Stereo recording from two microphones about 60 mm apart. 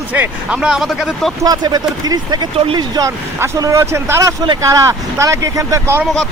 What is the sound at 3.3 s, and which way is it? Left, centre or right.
Speech, right.